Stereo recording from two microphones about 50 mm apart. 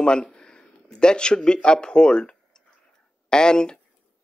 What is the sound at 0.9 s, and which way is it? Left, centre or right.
Speech, centre.